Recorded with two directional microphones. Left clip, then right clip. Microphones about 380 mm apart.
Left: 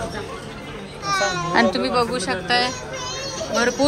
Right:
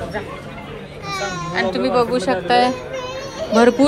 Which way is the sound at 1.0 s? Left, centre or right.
Left.